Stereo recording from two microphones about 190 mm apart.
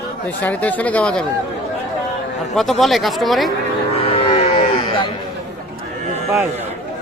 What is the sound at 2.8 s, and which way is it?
Speech, centre (ahead or behind).